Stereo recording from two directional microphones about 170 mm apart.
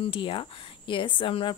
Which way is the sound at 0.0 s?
30° left (ahead or behind).